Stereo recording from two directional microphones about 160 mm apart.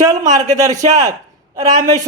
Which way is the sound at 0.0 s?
25° right (ahead or behind).